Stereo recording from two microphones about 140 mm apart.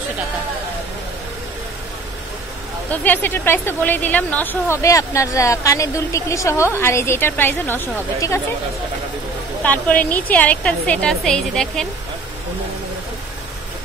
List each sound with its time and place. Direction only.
2.9 s a woman's voice: 15° left (ahead or behind)
9.6 s a woman's voice: 10° left (ahead or behind)